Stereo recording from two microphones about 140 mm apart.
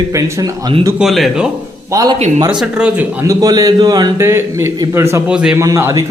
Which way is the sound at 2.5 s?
5° right (ahead or behind).